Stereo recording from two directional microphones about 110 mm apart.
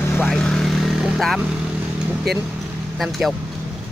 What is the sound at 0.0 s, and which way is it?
Vehicle, 20° left (ahead or behind).